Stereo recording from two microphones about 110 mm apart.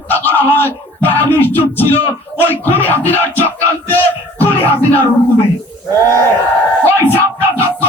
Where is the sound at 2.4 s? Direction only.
20° left (ahead or behind).